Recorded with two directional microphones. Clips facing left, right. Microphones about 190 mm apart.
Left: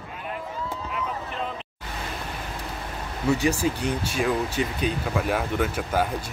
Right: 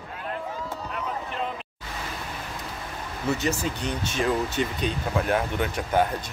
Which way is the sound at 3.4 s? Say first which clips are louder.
Left 4 dB; 10° left (ahead or behind).